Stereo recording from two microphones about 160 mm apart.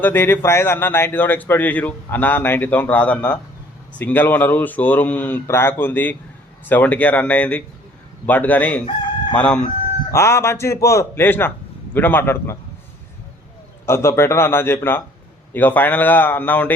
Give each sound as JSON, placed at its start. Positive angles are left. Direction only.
{"t": 0.0, "sound": "speech", "side_deg": 15}
{"t": 13.8, "sound": "speech", "side_deg": 15}